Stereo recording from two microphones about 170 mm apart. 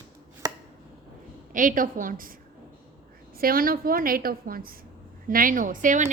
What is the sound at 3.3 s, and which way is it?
A woman's voice, 60° right (ahead or behind).